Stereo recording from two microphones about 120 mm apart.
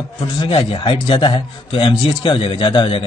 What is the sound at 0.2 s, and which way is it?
Speech, 45° left (ahead or behind).